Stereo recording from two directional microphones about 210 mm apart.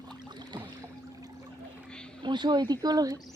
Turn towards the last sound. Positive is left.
turn(degrees=-15)  # may be behind; listen again after turning